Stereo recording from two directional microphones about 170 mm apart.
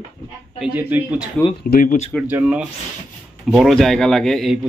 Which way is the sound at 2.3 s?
10° right (ahead or behind).